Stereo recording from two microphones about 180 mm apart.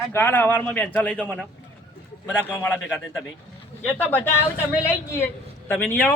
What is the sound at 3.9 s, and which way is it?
Speech, 10° left (ahead or behind).